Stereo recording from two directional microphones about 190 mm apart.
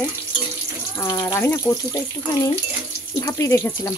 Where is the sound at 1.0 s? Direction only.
15° left (ahead or behind).